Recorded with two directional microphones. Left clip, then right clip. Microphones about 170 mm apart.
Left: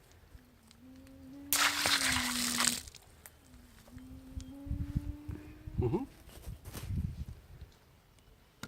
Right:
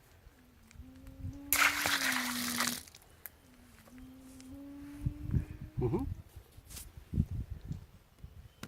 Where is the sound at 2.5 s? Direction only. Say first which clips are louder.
Left 3 dB; 10° left (ahead or behind).